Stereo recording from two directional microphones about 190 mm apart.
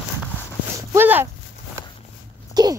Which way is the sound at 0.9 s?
10° right (ahead or behind).